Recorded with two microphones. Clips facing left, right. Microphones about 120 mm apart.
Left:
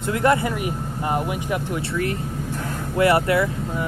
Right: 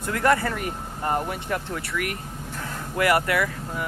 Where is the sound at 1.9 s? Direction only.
30° left (ahead or behind).